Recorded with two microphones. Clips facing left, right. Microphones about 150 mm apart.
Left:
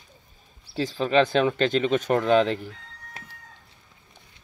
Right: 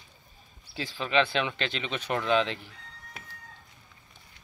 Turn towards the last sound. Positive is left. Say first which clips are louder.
# left 5 dB
turn(degrees=45)  # may be behind; listen again after turning